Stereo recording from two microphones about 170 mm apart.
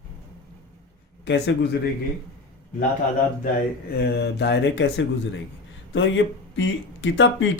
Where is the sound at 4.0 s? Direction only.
75° left (ahead or behind).